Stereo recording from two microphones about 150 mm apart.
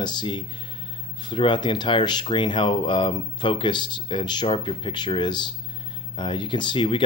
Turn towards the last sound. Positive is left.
turn(degrees=35)  # may be behind; listen again after turning